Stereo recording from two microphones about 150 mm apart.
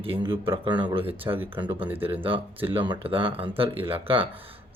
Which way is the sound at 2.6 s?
35° right (ahead or behind).